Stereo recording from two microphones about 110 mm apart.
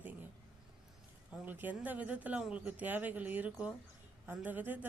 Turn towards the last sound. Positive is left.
turn(degrees=-15)  # may be behind; listen again after turning